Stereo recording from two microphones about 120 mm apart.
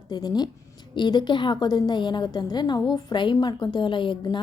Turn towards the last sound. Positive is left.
turn(degrees=40)  # may be behind; listen again after turning